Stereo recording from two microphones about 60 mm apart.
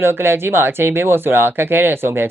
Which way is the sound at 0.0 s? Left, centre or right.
Right.